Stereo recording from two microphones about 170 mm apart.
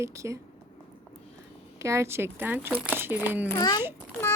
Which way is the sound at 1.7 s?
15° right (ahead or behind).